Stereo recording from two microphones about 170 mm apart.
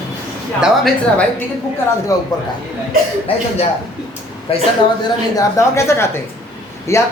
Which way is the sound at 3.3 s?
35° left (ahead or behind).